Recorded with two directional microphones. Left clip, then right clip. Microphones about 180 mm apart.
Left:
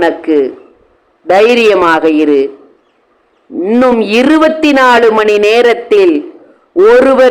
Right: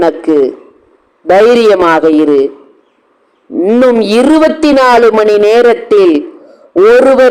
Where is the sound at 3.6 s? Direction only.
10° right (ahead or behind).